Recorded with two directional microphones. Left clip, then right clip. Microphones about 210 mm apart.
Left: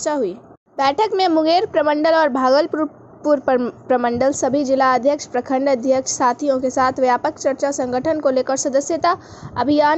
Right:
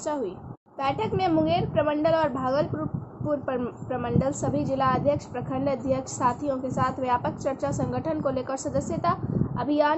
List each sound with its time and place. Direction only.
0.0 s a woman's voice: 30° left (ahead or behind)